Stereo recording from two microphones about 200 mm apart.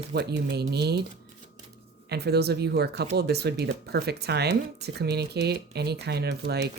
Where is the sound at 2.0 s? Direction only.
55° right (ahead or behind).